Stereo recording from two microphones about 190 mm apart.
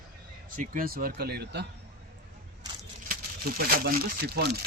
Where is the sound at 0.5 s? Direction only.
45° right (ahead or behind).